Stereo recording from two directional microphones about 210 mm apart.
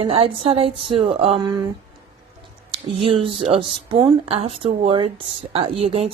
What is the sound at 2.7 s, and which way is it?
Speech, 25° right (ahead or behind).